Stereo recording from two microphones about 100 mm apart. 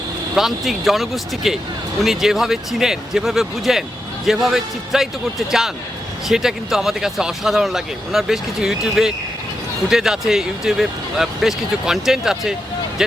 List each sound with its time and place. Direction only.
0.3 s speech: centre (ahead or behind)